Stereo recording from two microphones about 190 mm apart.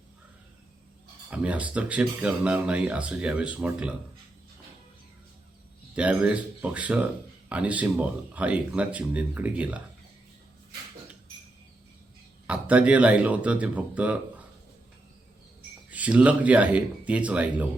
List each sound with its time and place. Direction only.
1.3 s speech: 5° right (ahead or behind)
5.9 s speech: 5° right (ahead or behind)
12.5 s speech: 5° right (ahead or behind)
15.9 s speech: 5° right (ahead or behind)